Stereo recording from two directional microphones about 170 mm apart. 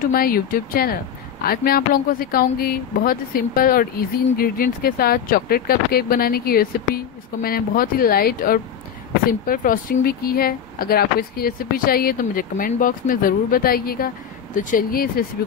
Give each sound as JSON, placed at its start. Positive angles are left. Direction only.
{"t": 0.0, "sound": "speech", "side_deg": 60}